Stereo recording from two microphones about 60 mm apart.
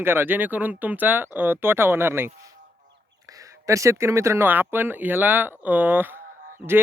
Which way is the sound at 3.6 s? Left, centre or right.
Right.